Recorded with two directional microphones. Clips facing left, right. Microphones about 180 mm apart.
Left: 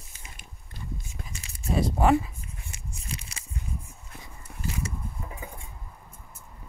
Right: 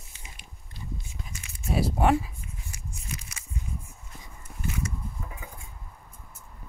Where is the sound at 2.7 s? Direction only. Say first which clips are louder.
Left 1 dB; 30° left (ahead or behind).